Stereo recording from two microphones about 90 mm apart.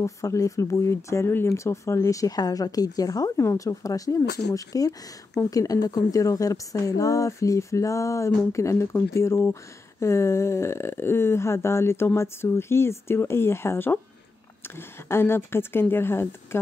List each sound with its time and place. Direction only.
0.0 s speech: 35° left (ahead or behind)